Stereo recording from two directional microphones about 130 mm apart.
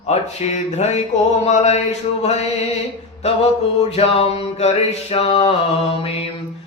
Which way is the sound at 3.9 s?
50° left (ahead or behind).